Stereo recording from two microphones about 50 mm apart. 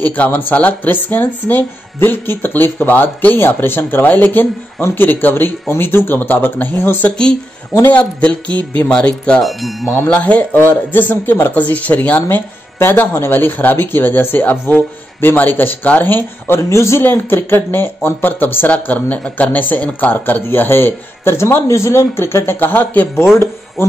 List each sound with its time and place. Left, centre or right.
0.0 s speech: left
6.1 s speech: left
6.8 s speech: left
7.1 s speech: centre
9.4 s speech: centre
10.0 s speech: left
11.5 s speech: left
12.7 s speech: left
16.5 s a man's voice: left
17.0 s speech: left
18.9 s speech: left
19.5 s speech: left